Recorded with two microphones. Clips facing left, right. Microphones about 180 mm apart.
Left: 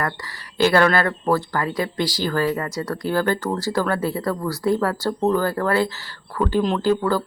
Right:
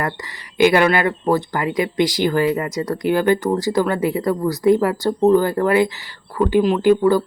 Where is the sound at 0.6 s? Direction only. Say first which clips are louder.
Right 3 dB; 15° right (ahead or behind).